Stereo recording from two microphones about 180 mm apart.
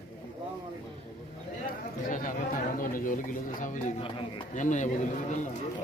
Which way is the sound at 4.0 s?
30° left (ahead or behind).